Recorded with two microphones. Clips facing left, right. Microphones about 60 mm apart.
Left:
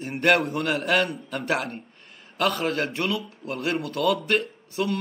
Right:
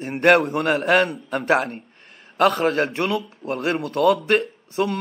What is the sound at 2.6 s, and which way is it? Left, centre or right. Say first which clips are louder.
Speech: right 5 dB; right.